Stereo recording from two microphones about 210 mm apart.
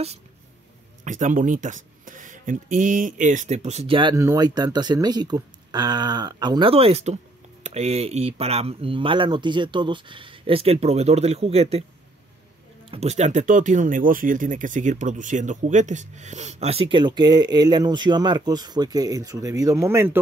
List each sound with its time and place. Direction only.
1.0 s speech: 35° right (ahead or behind)
12.9 s speech: 30° right (ahead or behind); by 20.2 s 10° right (ahead or behind)